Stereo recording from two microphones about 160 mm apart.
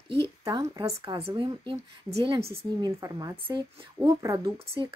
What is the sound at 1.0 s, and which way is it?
A woman's voice, 35° right (ahead or behind).